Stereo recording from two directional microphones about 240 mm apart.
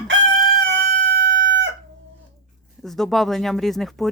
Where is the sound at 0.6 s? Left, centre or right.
Right.